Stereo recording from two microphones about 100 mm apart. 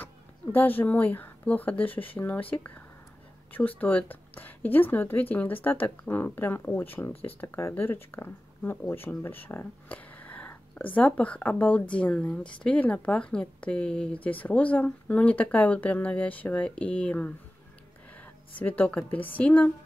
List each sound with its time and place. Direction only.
0.0 s a woman's voice: 20° left (ahead or behind)
8.9 s a sound: 20° left (ahead or behind)
11.0 s speech: 15° left (ahead or behind)
18.6 s speech: 15° left (ahead or behind)